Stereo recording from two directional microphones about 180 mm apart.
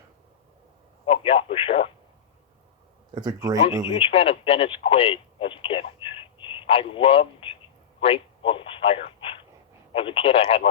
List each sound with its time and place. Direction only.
1.0 s radio: 30° left (ahead or behind)
3.2 s speech: 20° right (ahead or behind)
4.0 s speech: 30° left (ahead or behind)